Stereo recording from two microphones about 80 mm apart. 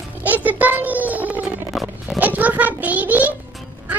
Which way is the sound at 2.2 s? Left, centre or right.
Right.